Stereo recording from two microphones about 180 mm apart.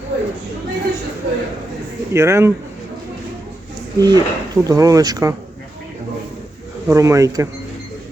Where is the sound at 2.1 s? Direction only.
15° right (ahead or behind).